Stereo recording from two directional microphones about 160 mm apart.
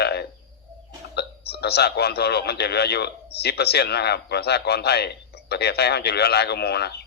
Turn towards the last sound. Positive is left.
turn(degrees=90)